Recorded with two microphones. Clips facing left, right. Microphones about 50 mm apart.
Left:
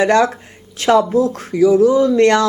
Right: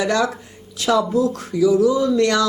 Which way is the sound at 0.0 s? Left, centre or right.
Left.